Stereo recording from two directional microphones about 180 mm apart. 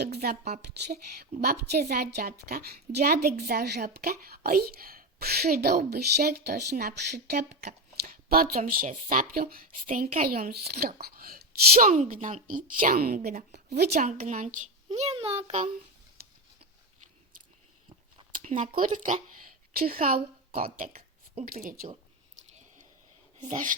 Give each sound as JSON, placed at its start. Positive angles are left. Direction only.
{"t": 0.0, "sound": "speech", "side_deg": -60}
{"t": 13.5, "sound": "speech", "side_deg": -65}
{"t": 14.8, "sound": "a child's voice", "side_deg": -30}
{"t": 16.2, "sound": "a sound", "side_deg": -60}
{"t": 18.3, "sound": "speech", "side_deg": -45}
{"t": 23.4, "sound": "speech", "side_deg": -45}